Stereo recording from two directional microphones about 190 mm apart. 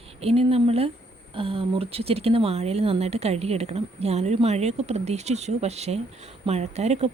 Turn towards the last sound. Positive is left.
turn(degrees=-35)  # may be behind; listen again after turning